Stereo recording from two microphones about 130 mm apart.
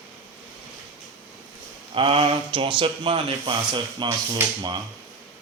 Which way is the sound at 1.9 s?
45° right (ahead or behind).